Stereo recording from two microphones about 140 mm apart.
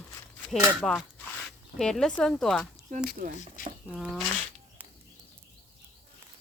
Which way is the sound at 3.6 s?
70° left (ahead or behind).